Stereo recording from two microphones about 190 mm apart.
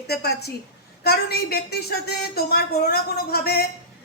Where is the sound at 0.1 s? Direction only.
60° left (ahead or behind).